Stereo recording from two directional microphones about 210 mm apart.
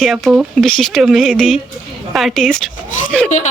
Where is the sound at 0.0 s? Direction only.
Centre (ahead or behind).